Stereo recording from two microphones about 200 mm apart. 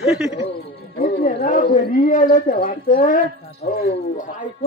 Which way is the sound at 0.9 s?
45° left (ahead or behind).